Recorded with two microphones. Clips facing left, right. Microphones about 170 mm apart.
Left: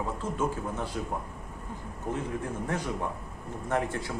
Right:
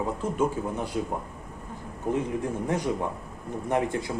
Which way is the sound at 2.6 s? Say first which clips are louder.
Right 5 dB; 15° right (ahead or behind).